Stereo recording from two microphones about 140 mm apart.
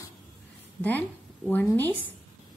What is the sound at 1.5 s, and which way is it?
Speech, 15° left (ahead or behind).